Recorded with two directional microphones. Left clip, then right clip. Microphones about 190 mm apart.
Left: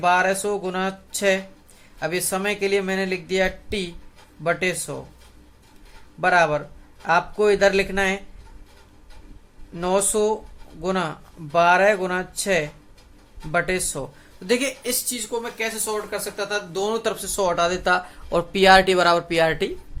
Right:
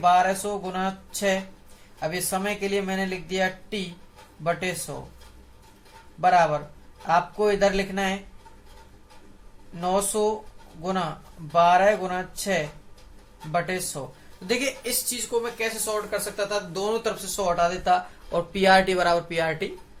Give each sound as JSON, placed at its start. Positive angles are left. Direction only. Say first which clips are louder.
{"t": 0.0, "sound": "speech", "louder": "left 1 dB", "side_deg": 50}
{"t": 6.1, "sound": "speech", "louder": "left 1 dB", "side_deg": 50}
{"t": 9.7, "sound": "speech", "louder": "left 3 dB", "side_deg": 50}